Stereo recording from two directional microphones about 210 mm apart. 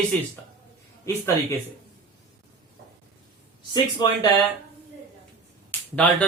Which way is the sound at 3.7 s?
20° left (ahead or behind).